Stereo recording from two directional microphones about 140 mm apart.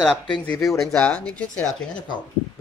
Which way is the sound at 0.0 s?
5° left (ahead or behind).